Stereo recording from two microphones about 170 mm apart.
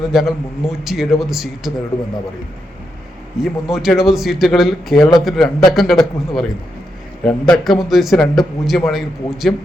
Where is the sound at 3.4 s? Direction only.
Centre (ahead or behind).